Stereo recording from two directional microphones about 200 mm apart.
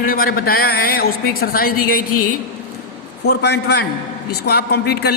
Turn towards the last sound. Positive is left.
turn(degrees=55)  # may be behind; listen again after turning